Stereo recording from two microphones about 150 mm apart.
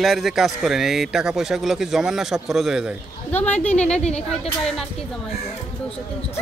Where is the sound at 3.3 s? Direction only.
10° left (ahead or behind).